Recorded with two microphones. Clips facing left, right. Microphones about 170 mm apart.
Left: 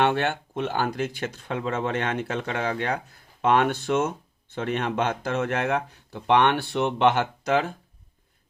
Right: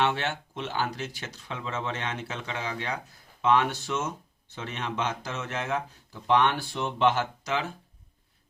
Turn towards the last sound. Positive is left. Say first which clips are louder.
# left 6 dB
turn(degrees=55)  # may be behind; listen again after turning